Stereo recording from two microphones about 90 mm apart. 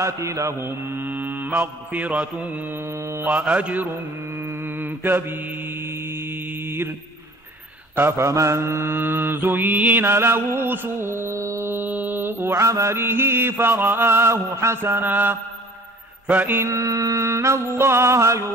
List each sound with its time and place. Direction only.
0.0 s music: 35° right (ahead or behind)
1.0 s mantra: 20° right (ahead or behind)
7.9 s mantra: 30° right (ahead or behind)
16.3 s music: 20° right (ahead or behind)